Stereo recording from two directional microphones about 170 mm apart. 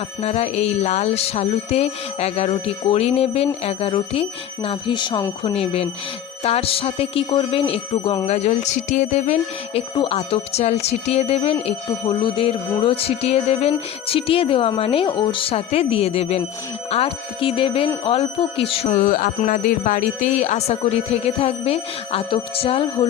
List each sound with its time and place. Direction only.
0.2 s speech: 40° left (ahead or behind)
8.3 s speech: 40° left (ahead or behind)
18.9 s music: 55° left (ahead or behind)
19.4 s speech: 50° left (ahead or behind); by 23.0 s 35° left (ahead or behind)